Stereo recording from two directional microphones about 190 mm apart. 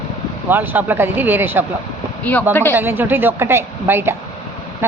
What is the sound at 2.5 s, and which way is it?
Speech, 10° left (ahead or behind).